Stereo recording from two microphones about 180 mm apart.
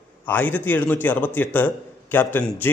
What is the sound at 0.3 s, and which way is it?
A man's voice, 10° left (ahead or behind).